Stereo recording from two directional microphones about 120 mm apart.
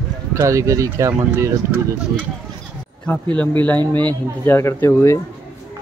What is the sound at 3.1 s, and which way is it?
Speech, 10° left (ahead or behind).